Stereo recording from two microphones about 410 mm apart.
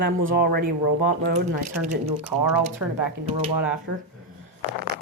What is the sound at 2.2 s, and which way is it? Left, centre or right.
A woman's voice, centre.